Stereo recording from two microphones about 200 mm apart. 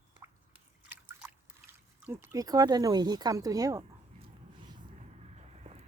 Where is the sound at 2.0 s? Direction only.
15° right (ahead or behind).